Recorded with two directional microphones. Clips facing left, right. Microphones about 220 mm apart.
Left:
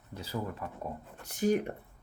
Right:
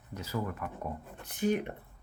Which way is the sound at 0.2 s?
30° left (ahead or behind).